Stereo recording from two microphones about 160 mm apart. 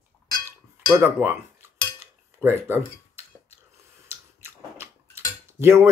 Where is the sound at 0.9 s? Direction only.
15° right (ahead or behind).